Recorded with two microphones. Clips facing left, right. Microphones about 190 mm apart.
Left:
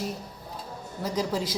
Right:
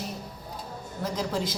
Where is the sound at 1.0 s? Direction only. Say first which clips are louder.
Left 1 dB; 10° left (ahead or behind).